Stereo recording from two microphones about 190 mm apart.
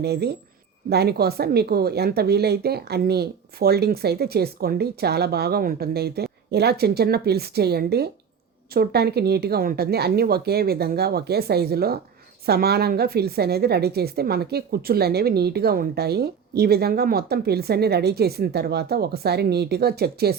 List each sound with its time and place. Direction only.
0.0 s a woman's voice: 60° right (ahead or behind)